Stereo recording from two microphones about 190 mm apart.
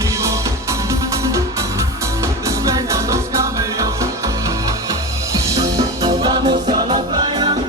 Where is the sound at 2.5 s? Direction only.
15° right (ahead or behind).